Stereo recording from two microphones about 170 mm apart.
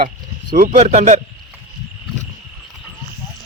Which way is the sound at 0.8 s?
40° right (ahead or behind).